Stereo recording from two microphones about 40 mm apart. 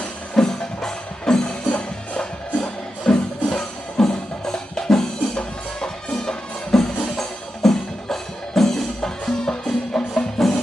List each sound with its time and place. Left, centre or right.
0.3 s music: centre
5.3 s music: left